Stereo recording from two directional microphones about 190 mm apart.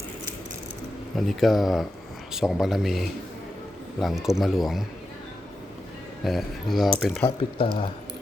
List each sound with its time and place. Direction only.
1.1 s speech: centre (ahead or behind)
6.2 s speech: centre (ahead or behind)
7.3 s speech: 30° left (ahead or behind)